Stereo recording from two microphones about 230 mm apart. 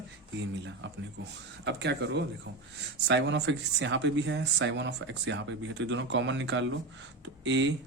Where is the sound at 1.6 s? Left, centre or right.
Right.